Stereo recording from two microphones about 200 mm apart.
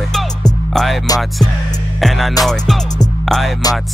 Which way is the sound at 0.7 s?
Centre (ahead or behind).